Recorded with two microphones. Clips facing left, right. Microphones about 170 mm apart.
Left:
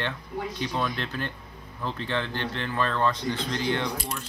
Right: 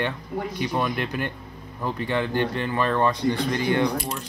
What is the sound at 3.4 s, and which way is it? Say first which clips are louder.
Speech: right 4 dB; 55° right (ahead or behind).